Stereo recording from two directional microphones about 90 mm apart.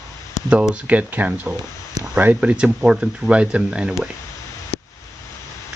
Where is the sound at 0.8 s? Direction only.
15° right (ahead or behind).